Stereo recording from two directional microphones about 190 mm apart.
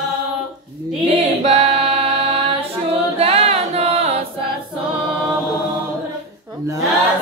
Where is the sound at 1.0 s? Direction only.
30° right (ahead or behind).